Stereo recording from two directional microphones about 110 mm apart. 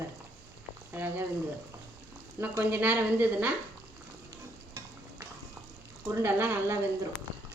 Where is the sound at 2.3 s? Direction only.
20° right (ahead or behind).